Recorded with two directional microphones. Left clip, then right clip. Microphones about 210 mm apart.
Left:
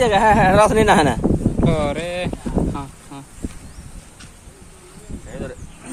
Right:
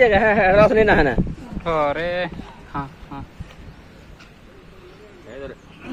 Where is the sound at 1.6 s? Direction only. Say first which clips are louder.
Right 3 dB; 20° left (ahead or behind).